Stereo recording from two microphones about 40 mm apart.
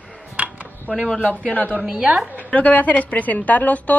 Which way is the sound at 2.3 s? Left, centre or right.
Left.